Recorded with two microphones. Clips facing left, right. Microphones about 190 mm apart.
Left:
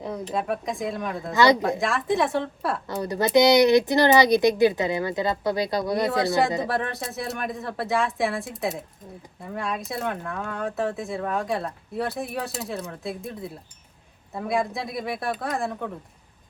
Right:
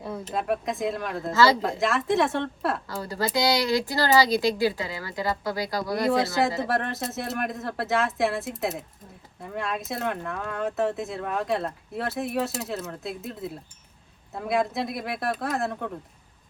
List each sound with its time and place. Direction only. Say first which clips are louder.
0.3 s speech: right 1 dB; centre (ahead or behind)
1.3 s speech: left 2 dB; 15° left (ahead or behind)
1.8 s speech: even; centre (ahead or behind)
2.8 s speech: left 4 dB; 20° left (ahead or behind)
6.6 s speech: even; centre (ahead or behind)